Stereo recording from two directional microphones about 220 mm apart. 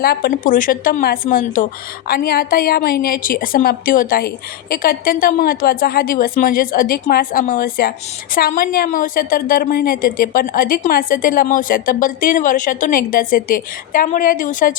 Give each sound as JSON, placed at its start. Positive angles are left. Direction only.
{"t": 0.0, "sound": "a woman's voice", "side_deg": 45}